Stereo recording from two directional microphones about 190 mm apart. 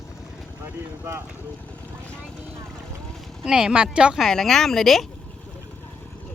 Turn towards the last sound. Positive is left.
turn(degrees=0)  # may be behind; listen again after turning